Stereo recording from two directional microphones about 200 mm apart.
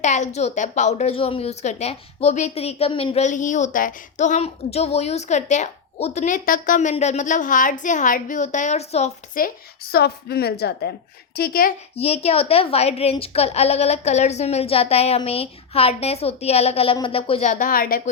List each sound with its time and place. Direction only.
0.0 s a woman's voice: 35° left (ahead or behind)
9.9 s a woman's voice: 50° left (ahead or behind)
11.9 s a woman's voice: 30° left (ahead or behind); by 18.1 s 45° left (ahead or behind)